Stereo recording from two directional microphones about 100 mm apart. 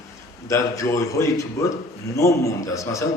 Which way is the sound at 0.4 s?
30° left (ahead or behind).